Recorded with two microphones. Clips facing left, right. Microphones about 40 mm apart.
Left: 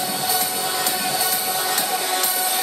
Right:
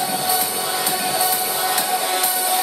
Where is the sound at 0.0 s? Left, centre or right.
Centre.